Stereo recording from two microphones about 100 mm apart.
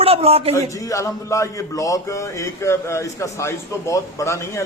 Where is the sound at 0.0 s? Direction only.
80° right.